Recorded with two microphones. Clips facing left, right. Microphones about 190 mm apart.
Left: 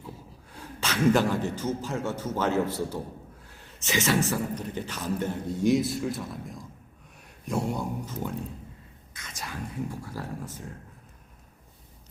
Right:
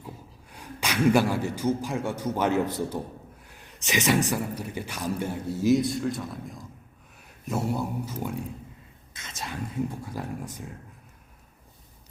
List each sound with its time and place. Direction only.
0.5 s speech: 15° right (ahead or behind)
9.1 s speech: 25° right (ahead or behind)